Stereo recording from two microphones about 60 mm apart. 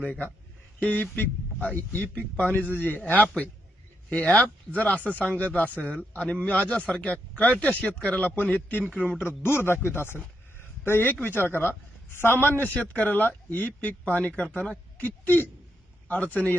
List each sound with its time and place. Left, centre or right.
0.0 s a man's voice: left
4.8 s a man's voice: left
8.8 s a man's voice: right
9.1 s a man's voice: left
10.2 s a sound: left
11.4 s a man's voice: left